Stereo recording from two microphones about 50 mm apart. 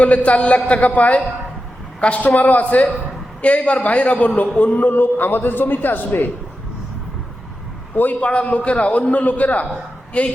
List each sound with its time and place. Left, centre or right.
0.0 s a man's voice: left
7.9 s a man's voice: left
8.2 s a man's voice: left